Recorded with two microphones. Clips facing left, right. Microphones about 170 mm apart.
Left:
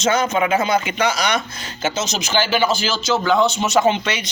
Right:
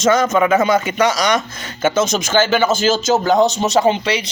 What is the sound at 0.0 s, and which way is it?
A man's voice, 45° right (ahead or behind).